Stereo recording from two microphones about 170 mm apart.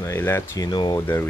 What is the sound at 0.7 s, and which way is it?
Speech, 25° left (ahead or behind).